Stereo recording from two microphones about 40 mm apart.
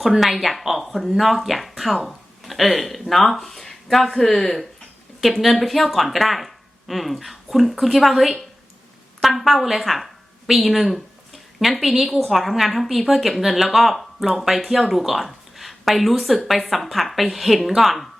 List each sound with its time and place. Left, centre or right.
0.1 s speech: centre